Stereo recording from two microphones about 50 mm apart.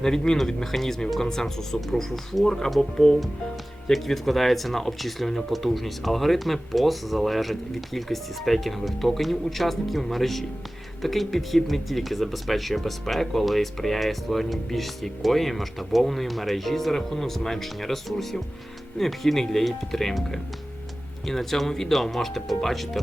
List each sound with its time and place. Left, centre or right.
0.0 s speech: centre